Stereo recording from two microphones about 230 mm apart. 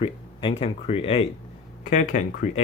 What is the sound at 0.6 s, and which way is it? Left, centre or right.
Speech, left.